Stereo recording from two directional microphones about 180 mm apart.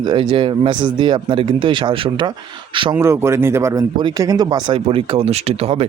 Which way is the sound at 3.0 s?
15° right (ahead or behind).